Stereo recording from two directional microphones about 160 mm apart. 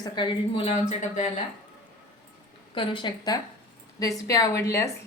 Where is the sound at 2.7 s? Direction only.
30° left (ahead or behind).